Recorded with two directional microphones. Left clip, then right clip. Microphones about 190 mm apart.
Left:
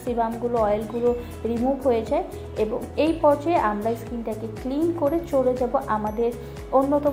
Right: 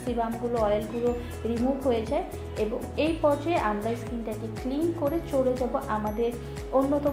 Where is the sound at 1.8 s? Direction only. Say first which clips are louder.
Left 6 dB; 25° left (ahead or behind).